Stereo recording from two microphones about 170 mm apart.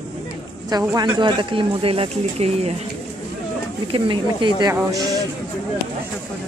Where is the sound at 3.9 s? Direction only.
30° right (ahead or behind).